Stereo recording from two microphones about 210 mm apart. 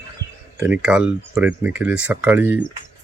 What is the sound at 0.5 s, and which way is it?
Speech, 10° right (ahead or behind).